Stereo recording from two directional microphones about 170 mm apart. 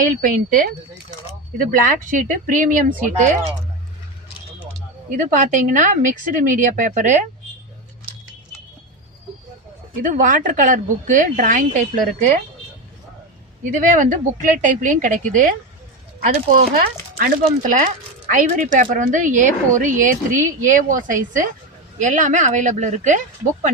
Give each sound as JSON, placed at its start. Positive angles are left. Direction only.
{"t": 0.0, "sound": "speech", "side_deg": -55}
{"t": 5.1, "sound": "speech", "side_deg": -45}
{"t": 10.0, "sound": "speech", "side_deg": -50}
{"t": 13.7, "sound": "speech", "side_deg": -50}